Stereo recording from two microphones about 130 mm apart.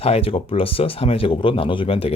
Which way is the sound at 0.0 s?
50° left (ahead or behind).